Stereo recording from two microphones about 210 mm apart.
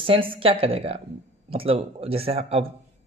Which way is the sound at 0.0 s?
25° right (ahead or behind).